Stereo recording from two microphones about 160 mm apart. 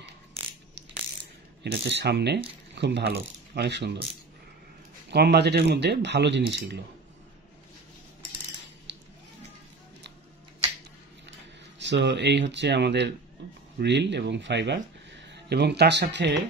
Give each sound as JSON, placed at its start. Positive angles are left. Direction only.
{"t": 0.4, "sound": "mechanisms", "side_deg": -40}
{"t": 1.6, "sound": "speech", "side_deg": -90}
{"t": 5.1, "sound": "speech", "side_deg": -90}
{"t": 8.9, "sound": "a sound", "side_deg": -90}
{"t": 11.8, "sound": "speech", "side_deg": -90}